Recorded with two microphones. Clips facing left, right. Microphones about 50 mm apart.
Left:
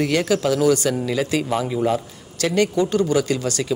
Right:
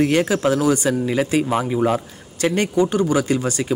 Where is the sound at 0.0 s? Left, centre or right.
Right.